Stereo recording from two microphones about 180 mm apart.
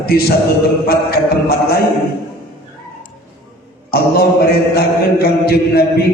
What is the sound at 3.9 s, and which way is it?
Mantra, 60° left (ahead or behind).